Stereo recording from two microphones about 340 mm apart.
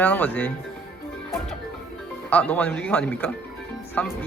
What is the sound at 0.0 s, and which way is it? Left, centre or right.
Speech, centre.